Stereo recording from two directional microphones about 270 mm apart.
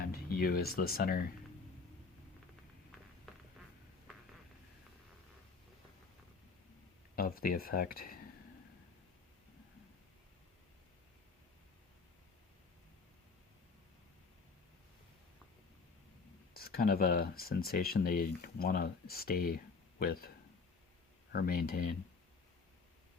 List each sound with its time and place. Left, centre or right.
0.0 s speech: left
7.2 s speech: left
16.6 s speech: left
21.3 s speech: left